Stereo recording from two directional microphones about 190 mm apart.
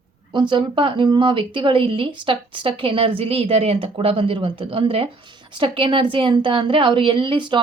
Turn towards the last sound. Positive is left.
turn(degrees=-25)  # may be behind; listen again after turning